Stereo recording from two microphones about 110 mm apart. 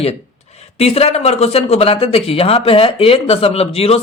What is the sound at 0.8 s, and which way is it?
Speech, 65° left (ahead or behind).